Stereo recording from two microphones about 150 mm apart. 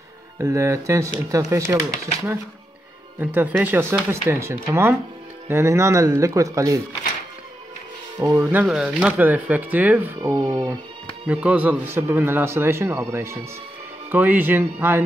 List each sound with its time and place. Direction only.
0.4 s speech: 20° right (ahead or behind)
3.2 s a man's voice: 15° right (ahead or behind)
8.2 s a man's voice: 15° right (ahead or behind)
10.3 s speech: 30° right (ahead or behind)
11.2 s a man's voice: 10° right (ahead or behind)